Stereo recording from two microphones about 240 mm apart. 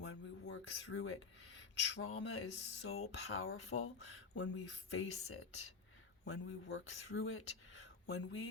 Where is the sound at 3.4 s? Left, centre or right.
Left.